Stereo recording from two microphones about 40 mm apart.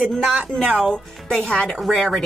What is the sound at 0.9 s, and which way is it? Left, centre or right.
Speech, centre.